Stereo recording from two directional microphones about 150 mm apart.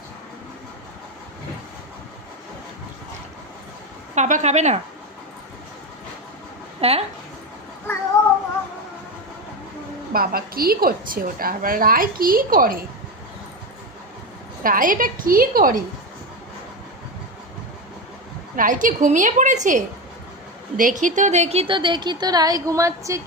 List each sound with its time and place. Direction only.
4.1 s speech: 50° right (ahead or behind)
6.8 s speech: 40° right (ahead or behind)
10.1 s a woman's voice: 80° right
14.6 s a woman's voice: 65° right (ahead or behind)
18.5 s a woman's voice: 65° right (ahead or behind); by 23.2 s 20° right (ahead or behind)